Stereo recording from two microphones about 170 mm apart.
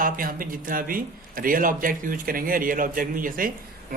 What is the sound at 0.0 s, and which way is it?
A man's voice, 55° right (ahead or behind).